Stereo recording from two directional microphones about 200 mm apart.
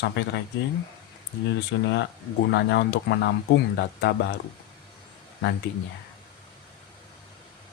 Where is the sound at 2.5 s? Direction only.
60° left (ahead or behind).